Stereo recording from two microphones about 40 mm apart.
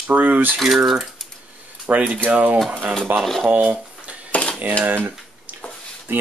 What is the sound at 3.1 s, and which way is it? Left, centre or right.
Speech, right.